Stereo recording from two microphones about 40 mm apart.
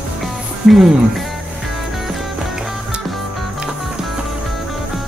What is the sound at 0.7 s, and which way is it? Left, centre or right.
Speech, centre.